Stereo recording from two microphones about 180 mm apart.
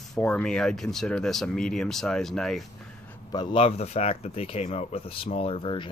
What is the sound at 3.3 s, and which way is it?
Speech, 25° left (ahead or behind).